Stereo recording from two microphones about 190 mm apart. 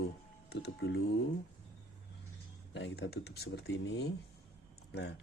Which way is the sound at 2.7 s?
70° left (ahead or behind).